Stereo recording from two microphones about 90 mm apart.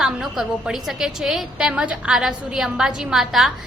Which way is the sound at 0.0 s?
5° right (ahead or behind).